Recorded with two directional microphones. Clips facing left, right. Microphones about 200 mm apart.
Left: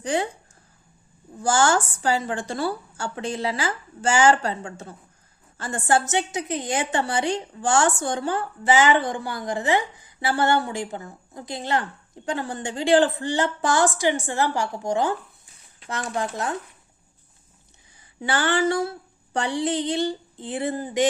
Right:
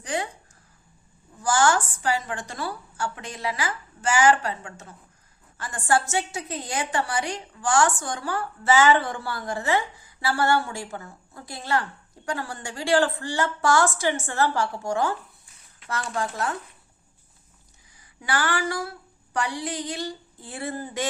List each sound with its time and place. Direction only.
0.0 s speech: 30° left (ahead or behind)
1.4 s a woman's voice: 25° left (ahead or behind)
18.2 s a woman's voice: 25° left (ahead or behind)